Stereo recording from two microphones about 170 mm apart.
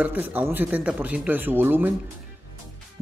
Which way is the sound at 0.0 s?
10° right (ahead or behind).